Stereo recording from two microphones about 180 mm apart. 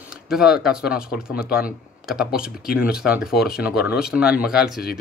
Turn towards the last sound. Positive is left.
turn(degrees=-5)  # may be behind; listen again after turning